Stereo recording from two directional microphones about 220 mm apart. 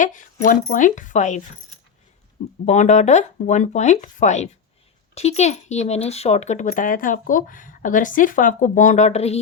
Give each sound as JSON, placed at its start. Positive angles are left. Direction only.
{"t": 0.0, "sound": "speech", "side_deg": 35}
{"t": 2.6, "sound": "speech", "side_deg": 30}